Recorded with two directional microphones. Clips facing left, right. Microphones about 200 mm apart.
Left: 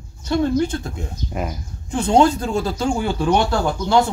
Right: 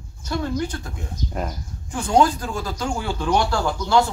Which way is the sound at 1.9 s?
25° left (ahead or behind).